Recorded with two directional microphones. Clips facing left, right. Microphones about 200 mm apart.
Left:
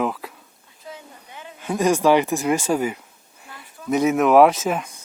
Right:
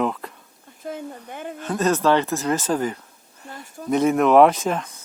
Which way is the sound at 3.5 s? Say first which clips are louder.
Right 2 dB; 45° right (ahead or behind).